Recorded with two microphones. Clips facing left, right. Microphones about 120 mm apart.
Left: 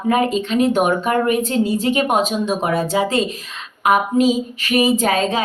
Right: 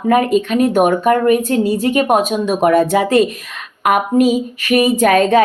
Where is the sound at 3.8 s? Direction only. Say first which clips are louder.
Right 2 dB; 55° right (ahead or behind).